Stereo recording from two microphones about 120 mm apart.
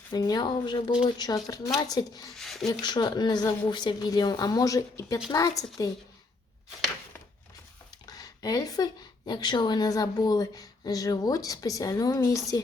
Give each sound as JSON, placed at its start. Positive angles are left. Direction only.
{"t": 0.1, "sound": "speech", "side_deg": 35}
{"t": 2.3, "sound": "a sound", "side_deg": 0}
{"t": 2.8, "sound": "speech", "side_deg": 40}
{"t": 8.0, "sound": "speech", "side_deg": 30}